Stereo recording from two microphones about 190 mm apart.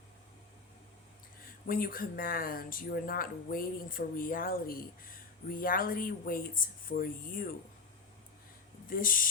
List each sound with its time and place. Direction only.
1.6 s speech: 50° left (ahead or behind)
8.9 s speech: 45° left (ahead or behind)